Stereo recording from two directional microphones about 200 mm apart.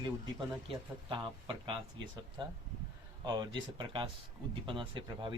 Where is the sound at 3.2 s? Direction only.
20° right (ahead or behind).